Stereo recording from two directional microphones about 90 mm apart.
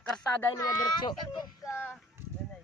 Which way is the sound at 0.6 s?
50° left (ahead or behind).